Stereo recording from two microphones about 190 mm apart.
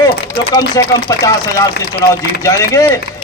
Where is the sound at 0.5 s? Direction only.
20° left (ahead or behind).